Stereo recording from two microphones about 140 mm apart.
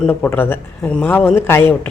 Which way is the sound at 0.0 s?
15° left (ahead or behind).